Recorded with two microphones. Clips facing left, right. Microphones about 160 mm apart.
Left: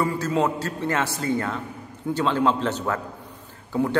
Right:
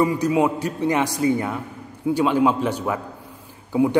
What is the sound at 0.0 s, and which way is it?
A man's voice, 15° right (ahead or behind).